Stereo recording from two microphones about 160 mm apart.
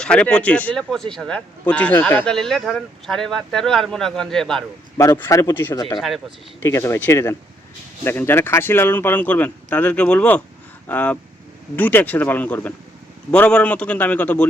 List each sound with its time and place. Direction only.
0.0 s speech: 5° left (ahead or behind)
4.9 s speech: 15° left (ahead or behind)